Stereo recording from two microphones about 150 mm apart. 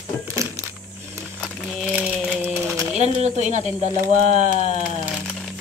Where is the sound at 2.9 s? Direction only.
50° right (ahead or behind).